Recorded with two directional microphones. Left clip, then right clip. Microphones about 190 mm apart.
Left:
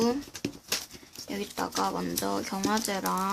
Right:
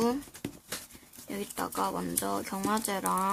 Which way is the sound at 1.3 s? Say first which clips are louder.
Left 3 dB; 10° right (ahead or behind).